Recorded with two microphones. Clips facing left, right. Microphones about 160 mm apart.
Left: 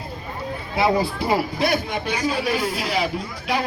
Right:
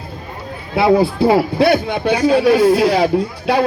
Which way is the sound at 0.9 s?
65° right (ahead or behind).